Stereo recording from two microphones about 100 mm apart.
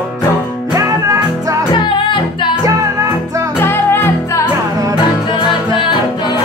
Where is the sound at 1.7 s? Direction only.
50° left (ahead or behind).